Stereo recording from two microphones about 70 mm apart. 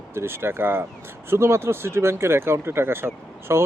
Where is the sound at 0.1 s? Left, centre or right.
Right.